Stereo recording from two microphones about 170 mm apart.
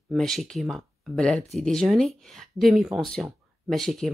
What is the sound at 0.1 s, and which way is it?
Speech, centre (ahead or behind).